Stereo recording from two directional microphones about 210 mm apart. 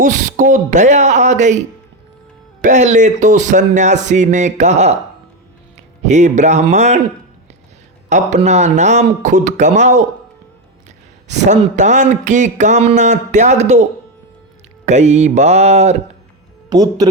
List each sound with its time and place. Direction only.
0.0 s speech: 35° right (ahead or behind)
2.6 s speech: 35° right (ahead or behind)
8.1 s speech: 35° right (ahead or behind)
14.8 s speech: 30° right (ahead or behind)
16.6 s speech: 20° right (ahead or behind)